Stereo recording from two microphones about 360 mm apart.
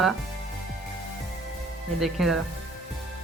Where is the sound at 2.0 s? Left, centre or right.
Centre.